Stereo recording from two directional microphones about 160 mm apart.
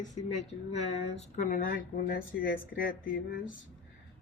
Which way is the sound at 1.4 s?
55° left (ahead or behind).